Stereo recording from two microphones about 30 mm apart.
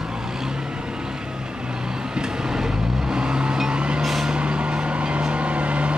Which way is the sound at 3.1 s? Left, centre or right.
Right.